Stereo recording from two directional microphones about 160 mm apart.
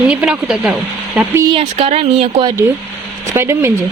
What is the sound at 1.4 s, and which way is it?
Speech, 35° right (ahead or behind).